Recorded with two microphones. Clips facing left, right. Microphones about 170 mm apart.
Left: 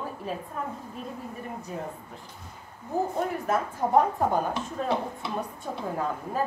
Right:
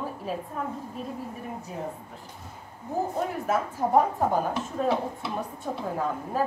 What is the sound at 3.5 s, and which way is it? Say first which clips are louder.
Speech: right 2 dB; 5° right (ahead or behind).